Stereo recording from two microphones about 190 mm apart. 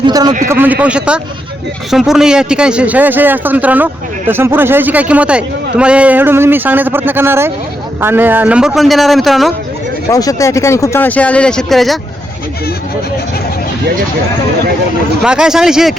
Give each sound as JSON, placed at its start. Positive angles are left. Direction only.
{"t": 0.0, "sound": "a man's voice", "side_deg": -20}
{"t": 0.4, "sound": "a man's voice", "side_deg": -10}
{"t": 10.1, "sound": "speech", "side_deg": 20}
{"t": 15.2, "sound": "a man's voice", "side_deg": -5}